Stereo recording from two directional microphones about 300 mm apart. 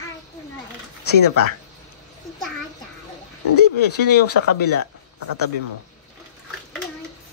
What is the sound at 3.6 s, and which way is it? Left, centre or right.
A woman's voice, left.